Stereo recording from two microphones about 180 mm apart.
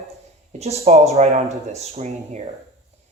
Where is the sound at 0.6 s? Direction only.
35° right (ahead or behind).